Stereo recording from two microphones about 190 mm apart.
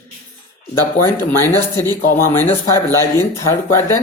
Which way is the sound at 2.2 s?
10° left (ahead or behind).